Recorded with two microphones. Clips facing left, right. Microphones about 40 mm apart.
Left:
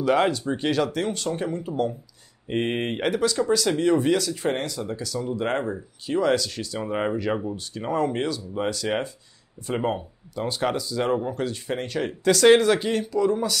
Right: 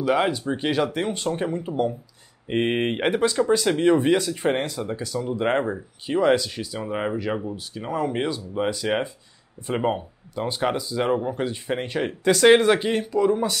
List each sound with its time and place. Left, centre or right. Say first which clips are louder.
0.0 s speech: left 1 dB; centre
0.4 s speech: even; centre
6.8 s speech: left 1 dB; centre
8.1 s speech: right 1 dB; centre